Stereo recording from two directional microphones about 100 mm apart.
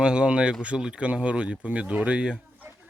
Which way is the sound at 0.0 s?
10° right (ahead or behind).